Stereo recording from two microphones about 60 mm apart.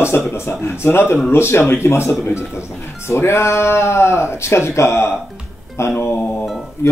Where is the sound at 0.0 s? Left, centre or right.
Left.